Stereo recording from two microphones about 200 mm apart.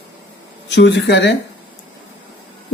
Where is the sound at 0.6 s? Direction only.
60° left (ahead or behind).